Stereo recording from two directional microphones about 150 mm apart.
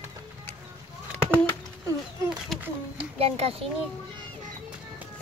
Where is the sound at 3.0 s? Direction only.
40° right (ahead or behind).